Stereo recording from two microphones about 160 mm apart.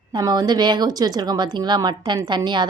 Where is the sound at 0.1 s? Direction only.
25° right (ahead or behind).